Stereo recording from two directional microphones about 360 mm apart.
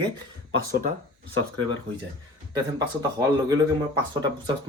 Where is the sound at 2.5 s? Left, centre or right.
Centre.